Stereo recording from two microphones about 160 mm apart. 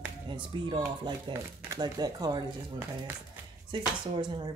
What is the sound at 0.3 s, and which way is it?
Speech, 30° right (ahead or behind).